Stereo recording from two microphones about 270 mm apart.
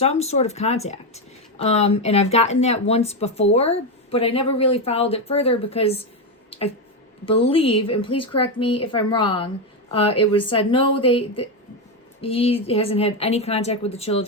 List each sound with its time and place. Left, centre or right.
0.0 s speech: left